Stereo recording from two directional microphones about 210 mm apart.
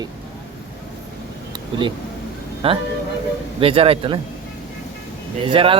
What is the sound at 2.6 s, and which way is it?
Speech, 25° right (ahead or behind).